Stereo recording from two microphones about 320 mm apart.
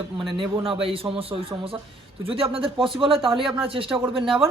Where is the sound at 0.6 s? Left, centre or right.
Centre.